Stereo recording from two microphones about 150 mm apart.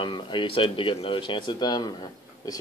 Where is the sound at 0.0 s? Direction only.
30° left (ahead or behind).